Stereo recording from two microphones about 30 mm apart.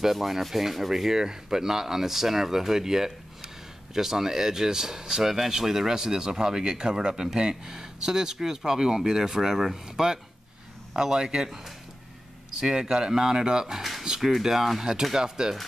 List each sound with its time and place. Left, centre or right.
0.0 s speech: centre
15.1 s speech: right